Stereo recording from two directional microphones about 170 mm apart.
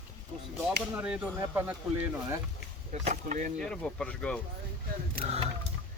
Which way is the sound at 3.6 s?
5° left (ahead or behind).